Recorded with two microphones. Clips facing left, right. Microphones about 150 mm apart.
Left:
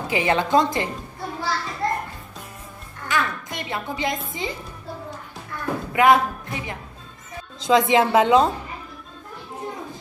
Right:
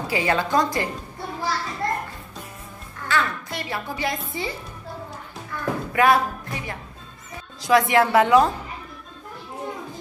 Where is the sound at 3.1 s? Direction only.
20° left (ahead or behind).